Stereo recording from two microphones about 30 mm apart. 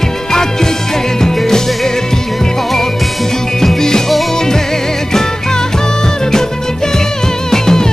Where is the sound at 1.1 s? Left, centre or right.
Centre.